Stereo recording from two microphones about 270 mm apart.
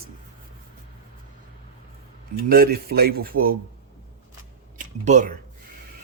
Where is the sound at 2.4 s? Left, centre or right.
Right.